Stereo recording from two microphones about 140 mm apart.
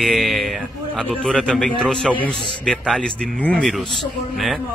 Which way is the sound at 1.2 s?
5° left (ahead or behind).